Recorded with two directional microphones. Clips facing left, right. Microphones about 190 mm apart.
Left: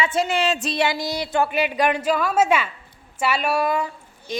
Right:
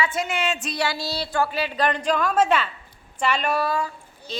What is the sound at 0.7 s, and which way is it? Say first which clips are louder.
A woman's voice: left 4 dB; 20° left (ahead or behind).